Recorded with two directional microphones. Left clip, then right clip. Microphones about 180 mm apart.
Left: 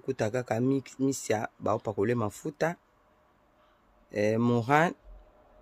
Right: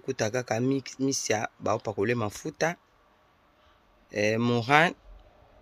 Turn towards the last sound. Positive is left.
turn(degrees=20)  # may be behind; listen again after turning